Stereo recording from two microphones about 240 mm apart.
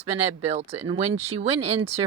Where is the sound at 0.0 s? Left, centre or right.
Right.